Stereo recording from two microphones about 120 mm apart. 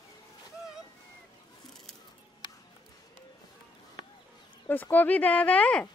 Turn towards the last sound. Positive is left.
turn(degrees=10)  # may be behind; listen again after turning